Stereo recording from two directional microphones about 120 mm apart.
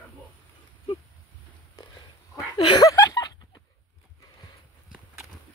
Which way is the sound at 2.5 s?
40° left (ahead or behind).